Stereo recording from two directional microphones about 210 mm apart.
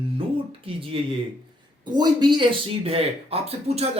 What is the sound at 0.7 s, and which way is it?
Speech, 25° right (ahead or behind).